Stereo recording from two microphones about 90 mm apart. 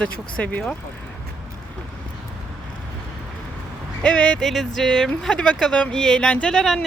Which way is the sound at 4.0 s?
10° left (ahead or behind).